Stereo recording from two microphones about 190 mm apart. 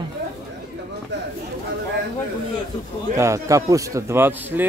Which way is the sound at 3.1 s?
15° right (ahead or behind).